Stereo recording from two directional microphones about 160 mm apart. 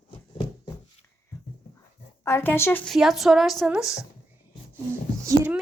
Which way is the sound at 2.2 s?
15° left (ahead or behind).